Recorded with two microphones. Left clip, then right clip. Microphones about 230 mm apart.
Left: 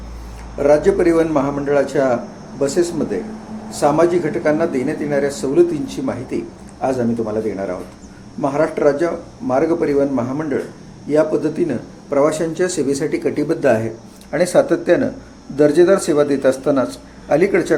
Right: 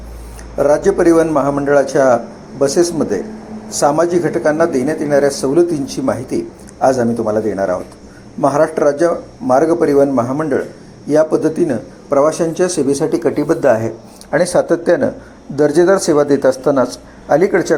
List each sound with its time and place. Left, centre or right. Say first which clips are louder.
0.8 s a man's voice: right 3 dB; centre
13.2 s speech: right 3 dB; centre
14.6 s speech: right 2 dB; centre